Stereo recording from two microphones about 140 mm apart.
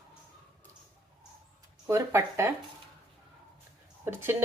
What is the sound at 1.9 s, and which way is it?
Speech, 20° right (ahead or behind).